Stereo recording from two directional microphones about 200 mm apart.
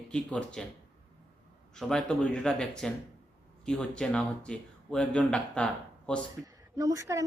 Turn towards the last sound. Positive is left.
turn(degrees=-15)  # may be behind; listen again after turning